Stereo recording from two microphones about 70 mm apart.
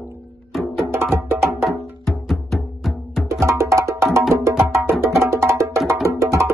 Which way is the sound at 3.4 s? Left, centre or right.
Right.